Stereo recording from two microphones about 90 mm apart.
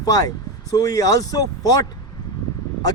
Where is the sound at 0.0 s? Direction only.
45° left (ahead or behind).